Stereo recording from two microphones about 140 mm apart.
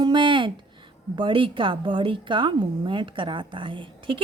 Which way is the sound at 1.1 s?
35° right (ahead or behind).